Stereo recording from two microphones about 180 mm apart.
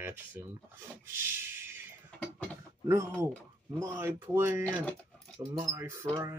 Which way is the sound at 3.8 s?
15° right (ahead or behind).